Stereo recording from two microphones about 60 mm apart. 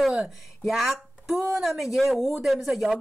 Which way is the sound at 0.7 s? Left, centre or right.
Centre.